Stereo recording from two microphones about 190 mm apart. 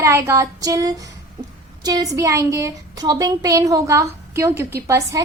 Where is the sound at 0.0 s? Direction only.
15° right (ahead or behind).